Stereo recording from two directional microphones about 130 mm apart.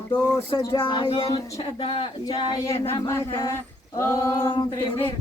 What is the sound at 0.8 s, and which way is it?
Speech, 40° left (ahead or behind).